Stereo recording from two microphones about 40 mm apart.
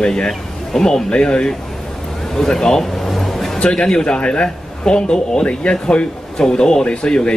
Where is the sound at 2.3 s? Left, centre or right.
Centre.